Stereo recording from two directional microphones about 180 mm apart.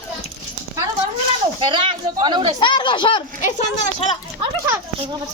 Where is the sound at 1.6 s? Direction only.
25° right (ahead or behind).